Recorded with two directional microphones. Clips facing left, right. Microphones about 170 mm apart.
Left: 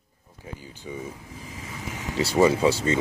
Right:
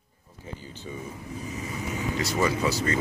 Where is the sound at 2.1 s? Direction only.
30° left (ahead or behind).